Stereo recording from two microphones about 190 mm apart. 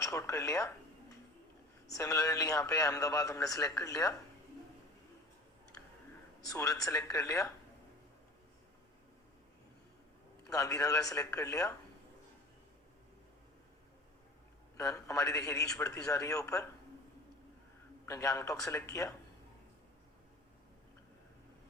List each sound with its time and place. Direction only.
0.0 s speech: 15° left (ahead or behind)
1.9 s a man's voice: 15° left (ahead or behind)
6.4 s a man's voice: 15° left (ahead or behind)
10.5 s a man's voice: 15° left (ahead or behind)
14.8 s a man's voice: 15° left (ahead or behind)
18.0 s a man's voice: 15° left (ahead or behind)